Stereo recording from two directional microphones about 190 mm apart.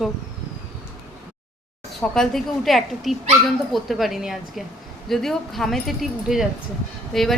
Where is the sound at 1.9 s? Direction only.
Centre (ahead or behind).